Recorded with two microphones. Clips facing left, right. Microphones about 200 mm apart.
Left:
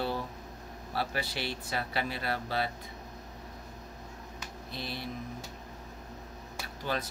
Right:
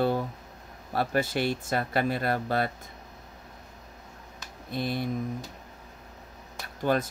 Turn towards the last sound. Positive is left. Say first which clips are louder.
# right 8 dB
turn(degrees=-50)  # may be behind; listen again after turning